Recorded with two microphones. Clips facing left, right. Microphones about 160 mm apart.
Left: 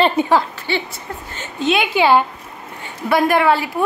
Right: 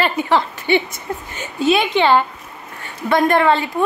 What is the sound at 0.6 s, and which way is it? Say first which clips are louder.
A woman's voice: right 5 dB; 20° right (ahead or behind).